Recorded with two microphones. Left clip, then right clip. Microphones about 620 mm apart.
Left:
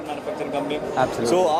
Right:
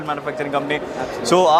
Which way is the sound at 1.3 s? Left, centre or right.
Right.